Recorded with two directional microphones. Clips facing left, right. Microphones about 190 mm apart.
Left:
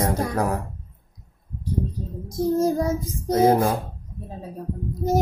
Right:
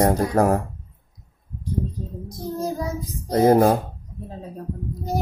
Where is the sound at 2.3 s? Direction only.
50° left (ahead or behind).